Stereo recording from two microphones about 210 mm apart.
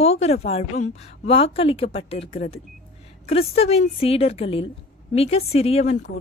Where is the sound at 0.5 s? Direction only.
30° left (ahead or behind).